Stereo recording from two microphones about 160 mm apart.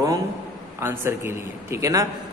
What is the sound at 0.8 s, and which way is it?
A man's voice, 15° right (ahead or behind).